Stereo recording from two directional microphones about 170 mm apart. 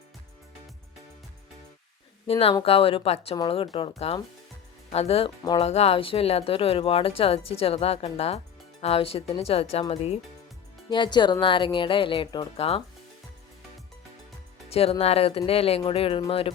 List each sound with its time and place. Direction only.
2.2 s speech: 35° left (ahead or behind)
10.8 s speech: 25° left (ahead or behind)
14.7 s speech: 35° left (ahead or behind)